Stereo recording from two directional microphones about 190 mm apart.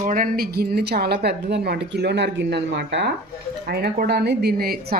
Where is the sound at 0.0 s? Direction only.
45° right (ahead or behind).